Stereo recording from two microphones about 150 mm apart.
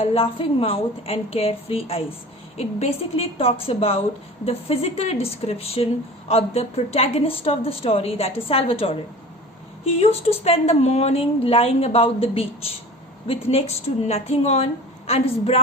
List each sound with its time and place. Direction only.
0.0 s speech: 40° left (ahead or behind)
10.0 s a woman's voice: 40° left (ahead or behind)